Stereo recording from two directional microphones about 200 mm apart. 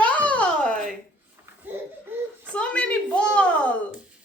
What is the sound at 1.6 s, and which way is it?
Laughter, 10° right (ahead or behind).